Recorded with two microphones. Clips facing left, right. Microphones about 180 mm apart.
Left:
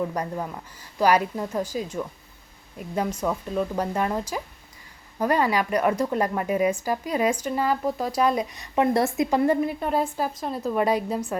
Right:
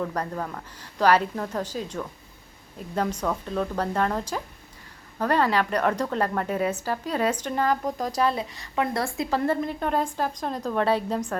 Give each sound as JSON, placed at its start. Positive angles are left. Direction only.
{"t": 0.0, "sound": "speech", "side_deg": 10}